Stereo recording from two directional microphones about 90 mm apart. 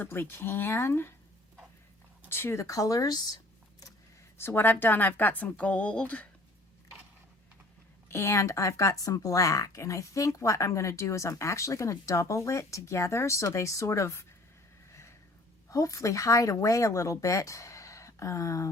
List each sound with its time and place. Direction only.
0.0 s a woman's voice: 25° left (ahead or behind)
2.3 s speech: 30° left (ahead or behind); by 3.9 s 45° left (ahead or behind)
4.4 s a woman's voice: 25° left (ahead or behind)
8.1 s speech: 35° left (ahead or behind)
14.8 s a sound: 30° left (ahead or behind)
15.7 s speech: 40° left (ahead or behind)